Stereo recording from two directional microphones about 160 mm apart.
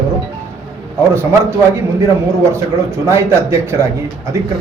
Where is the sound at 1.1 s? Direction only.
15° right (ahead or behind).